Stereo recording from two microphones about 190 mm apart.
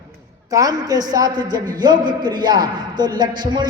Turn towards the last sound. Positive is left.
turn(degrees=-20)  # may be behind; listen again after turning